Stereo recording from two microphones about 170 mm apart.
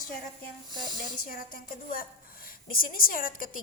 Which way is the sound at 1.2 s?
55° left (ahead or behind).